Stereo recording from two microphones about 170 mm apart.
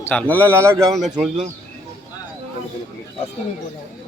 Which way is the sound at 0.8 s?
Centre (ahead or behind).